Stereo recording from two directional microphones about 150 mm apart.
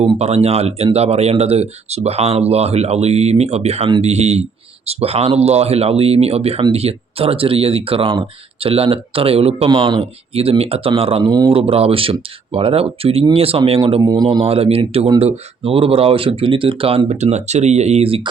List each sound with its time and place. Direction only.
0.0 s speech: 45° right (ahead or behind)
9.6 s speech: 30° right (ahead or behind)
11.3 s speech: 25° right (ahead or behind)
11.5 s speech: 40° right (ahead or behind)
14.0 s speech: 25° right (ahead or behind)
14.3 s speech: 40° right (ahead or behind)